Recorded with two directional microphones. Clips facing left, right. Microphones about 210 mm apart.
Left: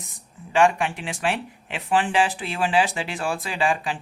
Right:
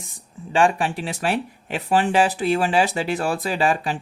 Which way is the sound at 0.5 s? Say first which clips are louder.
Even; 35° right (ahead or behind).